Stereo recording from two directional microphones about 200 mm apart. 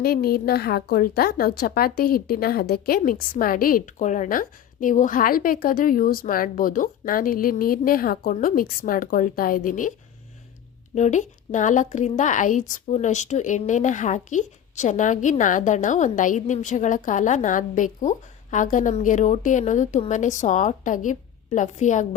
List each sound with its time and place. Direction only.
0.0 s a woman's voice: 50° left (ahead or behind)
10.9 s speech: 35° left (ahead or behind)